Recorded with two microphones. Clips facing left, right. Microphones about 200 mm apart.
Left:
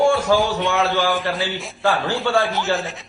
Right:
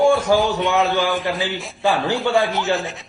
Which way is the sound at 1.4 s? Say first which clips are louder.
Right 1 dB; 15° right (ahead or behind).